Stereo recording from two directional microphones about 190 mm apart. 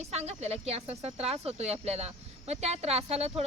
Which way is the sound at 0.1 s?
35° right (ahead or behind).